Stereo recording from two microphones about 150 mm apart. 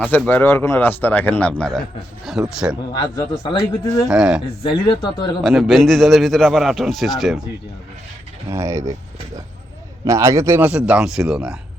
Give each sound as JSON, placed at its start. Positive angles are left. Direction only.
{"t": 0.0, "sound": "a man's voice", "side_deg": 10}
{"t": 2.6, "sound": "speech", "side_deg": -10}
{"t": 3.4, "sound": "speech", "side_deg": 35}
{"t": 4.1, "sound": "a man's voice", "side_deg": -5}
{"t": 4.6, "sound": "speech", "side_deg": 30}
{"t": 5.4, "sound": "a man's voice", "side_deg": 0}
{"t": 8.4, "sound": "speech", "side_deg": -20}